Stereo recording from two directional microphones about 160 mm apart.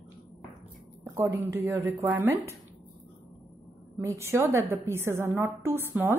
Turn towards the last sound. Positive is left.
turn(degrees=-15)  # may be behind; listen again after turning